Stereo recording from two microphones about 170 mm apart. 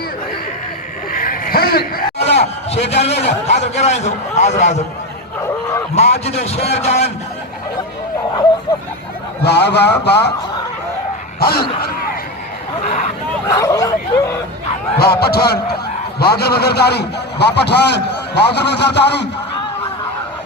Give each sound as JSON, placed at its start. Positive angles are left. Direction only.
{"t": 1.1, "sound": "vehicle", "side_deg": 60}
{"t": 2.1, "sound": "a sound", "side_deg": 35}
{"t": 2.9, "sound": "a man's voice", "side_deg": 40}
{"t": 5.9, "sound": "a man's voice", "side_deg": 40}
{"t": 9.4, "sound": "a man's voice", "side_deg": 80}
{"t": 11.3, "sound": "speech", "side_deg": 65}
{"t": 13.5, "sound": "bow-wow", "side_deg": 20}
{"t": 14.9, "sound": "a man's voice", "side_deg": 65}